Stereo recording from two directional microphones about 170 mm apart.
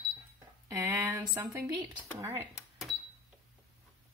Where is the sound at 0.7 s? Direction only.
15° right (ahead or behind).